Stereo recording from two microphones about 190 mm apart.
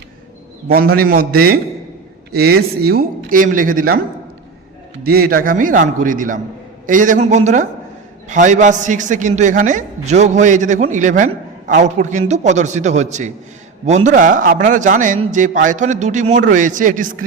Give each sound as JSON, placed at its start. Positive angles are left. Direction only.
{"t": 0.7, "sound": "a man's voice", "side_deg": -50}
{"t": 5.0, "sound": "a man's voice", "side_deg": -55}